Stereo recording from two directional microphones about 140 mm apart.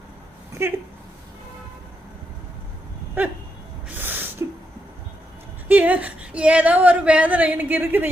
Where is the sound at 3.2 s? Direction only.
15° right (ahead or behind).